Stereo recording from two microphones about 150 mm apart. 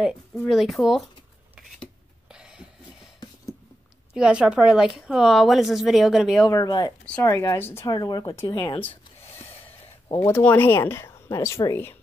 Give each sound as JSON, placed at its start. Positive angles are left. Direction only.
{"t": 0.5, "sound": "a woman's voice", "side_deg": 0}
{"t": 1.8, "sound": "a sound", "side_deg": -5}
{"t": 4.1, "sound": "a woman's voice", "side_deg": -5}
{"t": 6.5, "sound": "speech", "side_deg": 25}
{"t": 7.8, "sound": "speech", "side_deg": 25}
{"t": 10.2, "sound": "speech", "side_deg": 15}